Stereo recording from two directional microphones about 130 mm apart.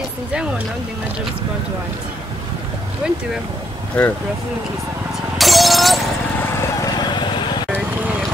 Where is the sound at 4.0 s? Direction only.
10° left (ahead or behind).